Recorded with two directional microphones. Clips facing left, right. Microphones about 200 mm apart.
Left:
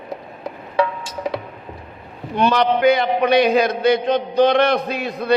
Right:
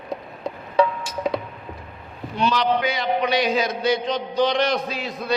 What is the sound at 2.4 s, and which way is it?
A man's voice, 55° left (ahead or behind).